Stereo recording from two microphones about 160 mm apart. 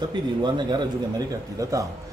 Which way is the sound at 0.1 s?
30° right (ahead or behind).